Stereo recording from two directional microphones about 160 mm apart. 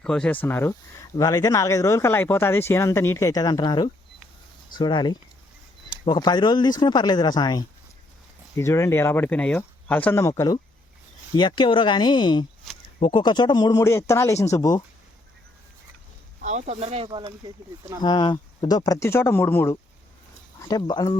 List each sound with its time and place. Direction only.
0.0 s speech: 5° left (ahead or behind); by 14.8 s 25° left (ahead or behind)
16.4 s speech: 45° right (ahead or behind)
18.0 s speech: 25° left (ahead or behind)